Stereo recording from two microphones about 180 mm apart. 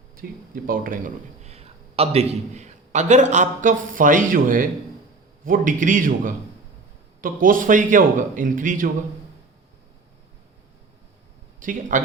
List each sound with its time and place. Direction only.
0.2 s a man's voice: 50° right (ahead or behind)
11.6 s a man's voice: 45° right (ahead or behind)